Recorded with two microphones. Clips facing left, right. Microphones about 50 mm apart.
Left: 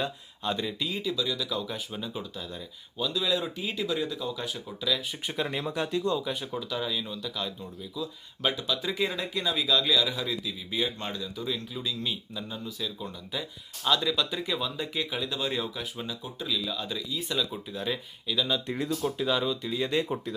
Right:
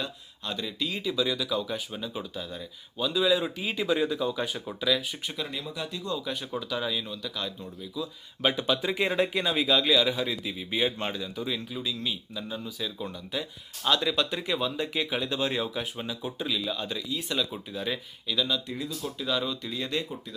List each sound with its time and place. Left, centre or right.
0.4 s speech: centre
0.8 s a man's voice: centre
1.1 s speech: right
1.4 s a man's voice: centre
5.3 s speech: left
6.1 s a man's voice: centre
8.5 s speech: right
10.4 s speech: right
11.2 s a man's voice: centre
14.0 s speech: centre
15.7 s a man's voice: right; by 18.4 s centre
18.7 s speech: left
19.0 s speech: left
19.3 s a man's voice: centre